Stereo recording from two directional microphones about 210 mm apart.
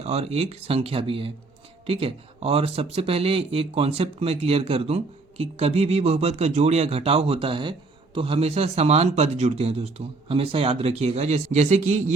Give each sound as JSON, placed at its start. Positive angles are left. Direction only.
{"t": 0.0, "sound": "speech", "side_deg": -30}